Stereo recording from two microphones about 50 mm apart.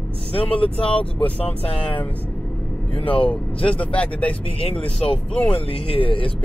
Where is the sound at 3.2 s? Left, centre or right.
Left.